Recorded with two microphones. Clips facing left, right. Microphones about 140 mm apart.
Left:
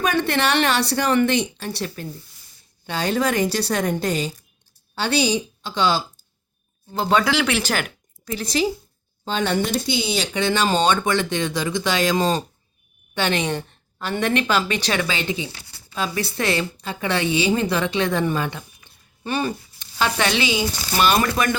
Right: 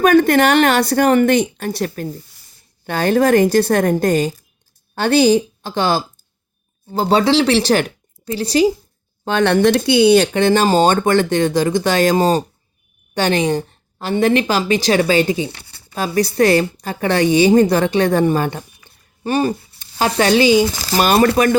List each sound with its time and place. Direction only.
0.0 s a woman's voice: 50° right (ahead or behind)
6.9 s a woman's voice: 35° right (ahead or behind)
9.2 s a woman's voice: 70° right (ahead or behind); by 20.7 s 40° right (ahead or behind)
20.7 s speech: 90° right
21.0 s a woman's voice: 40° right (ahead or behind)